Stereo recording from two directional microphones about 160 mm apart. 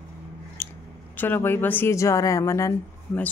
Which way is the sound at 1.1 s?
10° left (ahead or behind).